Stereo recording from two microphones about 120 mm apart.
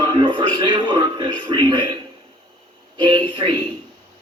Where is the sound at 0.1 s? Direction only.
40° right (ahead or behind).